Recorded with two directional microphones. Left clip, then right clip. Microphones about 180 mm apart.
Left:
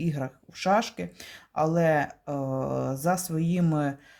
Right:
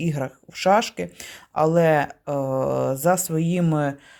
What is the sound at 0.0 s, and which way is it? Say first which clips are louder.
Speech: right 5 dB; 30° right (ahead or behind).